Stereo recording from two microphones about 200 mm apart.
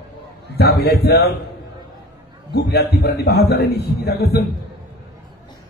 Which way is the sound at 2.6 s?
55° left (ahead or behind).